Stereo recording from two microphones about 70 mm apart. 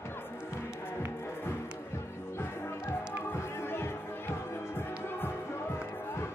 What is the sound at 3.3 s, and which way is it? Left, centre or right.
Music, left.